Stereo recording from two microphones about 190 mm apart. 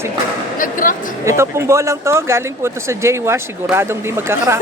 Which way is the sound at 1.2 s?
15° right (ahead or behind).